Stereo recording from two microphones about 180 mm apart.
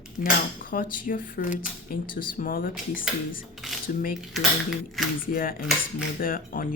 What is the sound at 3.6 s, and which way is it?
Cutlery, centre (ahead or behind).